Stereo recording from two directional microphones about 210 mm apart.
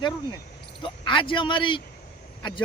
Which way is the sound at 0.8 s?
25° left (ahead or behind).